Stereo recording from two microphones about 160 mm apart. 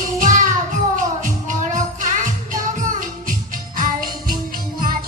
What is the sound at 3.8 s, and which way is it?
Music, 60° right (ahead or behind).